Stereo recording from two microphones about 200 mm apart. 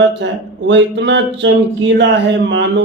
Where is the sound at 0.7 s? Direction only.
60° right (ahead or behind).